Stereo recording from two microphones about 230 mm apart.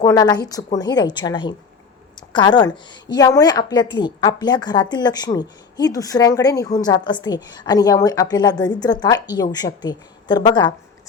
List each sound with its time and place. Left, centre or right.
0.0 s a woman's voice: centre